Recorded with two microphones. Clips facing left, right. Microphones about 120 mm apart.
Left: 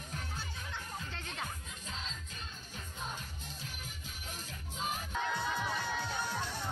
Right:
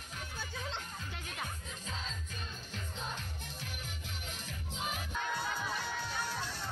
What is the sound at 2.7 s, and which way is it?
Music, 65° right (ahead or behind).